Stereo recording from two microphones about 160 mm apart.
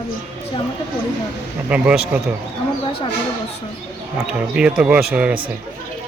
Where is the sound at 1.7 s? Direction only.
10° right (ahead or behind).